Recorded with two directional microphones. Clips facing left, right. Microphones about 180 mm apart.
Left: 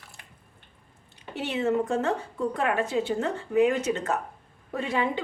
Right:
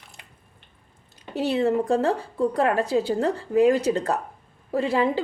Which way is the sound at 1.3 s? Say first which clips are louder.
Right 4 dB; 35° right (ahead or behind).